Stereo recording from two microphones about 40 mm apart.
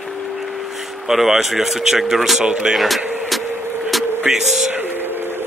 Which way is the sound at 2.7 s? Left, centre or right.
Centre.